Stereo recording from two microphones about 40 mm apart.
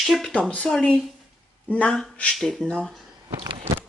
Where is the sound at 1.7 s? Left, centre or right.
Left.